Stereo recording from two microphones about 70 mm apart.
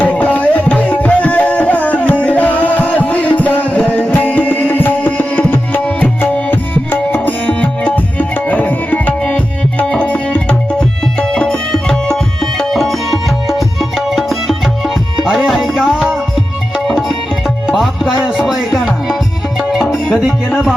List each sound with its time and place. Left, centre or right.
0.0 s music: left; by 16.1 s centre
16.8 s tabla: centre
17.7 s music: centre